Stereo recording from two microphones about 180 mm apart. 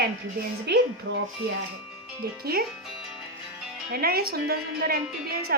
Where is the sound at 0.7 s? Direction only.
70° right (ahead or behind).